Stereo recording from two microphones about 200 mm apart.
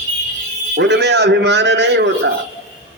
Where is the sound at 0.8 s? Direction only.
60° right (ahead or behind).